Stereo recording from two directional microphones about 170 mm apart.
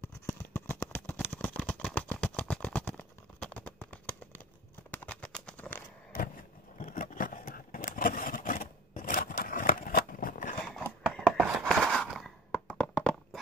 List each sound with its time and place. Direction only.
0.0 s a sound: 15° left (ahead or behind)
4.9 s bird: 5° left (ahead or behind)
6.8 s vehicle: 50° left (ahead or behind)
11.0 s sigh: centre (ahead or behind)